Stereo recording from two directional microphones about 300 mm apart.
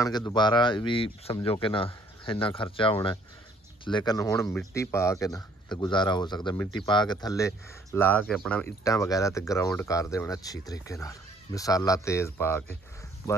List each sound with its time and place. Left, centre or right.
0.0 s speech: centre